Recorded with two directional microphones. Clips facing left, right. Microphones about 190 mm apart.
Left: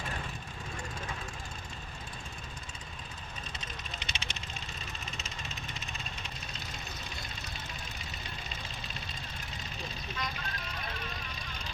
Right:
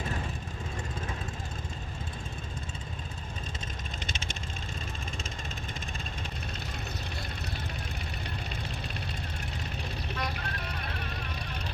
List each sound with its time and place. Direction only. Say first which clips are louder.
4.0 s vehicle: right 4 dB; 50° right (ahead or behind)
10.2 s vehicle: right 2 dB; 60° right (ahead or behind)